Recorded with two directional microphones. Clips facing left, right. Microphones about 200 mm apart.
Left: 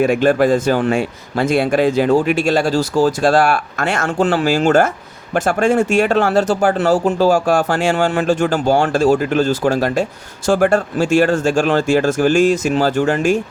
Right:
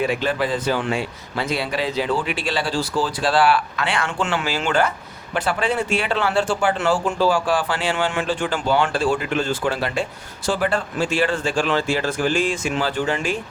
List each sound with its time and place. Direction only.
0.0 s speech: 50° left (ahead or behind)